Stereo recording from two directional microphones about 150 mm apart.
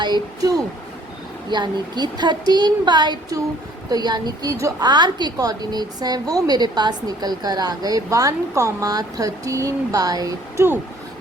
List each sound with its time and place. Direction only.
0.0 s a woman's voice: 25° right (ahead or behind)